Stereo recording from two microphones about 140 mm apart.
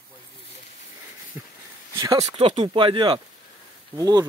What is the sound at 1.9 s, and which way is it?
Speech, 25° right (ahead or behind).